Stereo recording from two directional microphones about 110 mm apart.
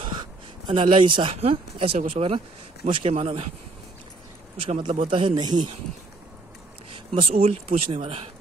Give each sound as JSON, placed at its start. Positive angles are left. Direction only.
{"t": 0.7, "sound": "speech", "side_deg": -50}
{"t": 4.6, "sound": "speech", "side_deg": -65}
{"t": 7.2, "sound": "speech", "side_deg": -60}